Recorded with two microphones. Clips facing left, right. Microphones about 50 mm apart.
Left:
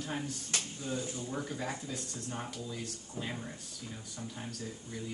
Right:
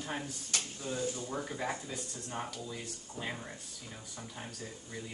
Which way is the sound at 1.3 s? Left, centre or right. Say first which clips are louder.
Right 1 dB; centre.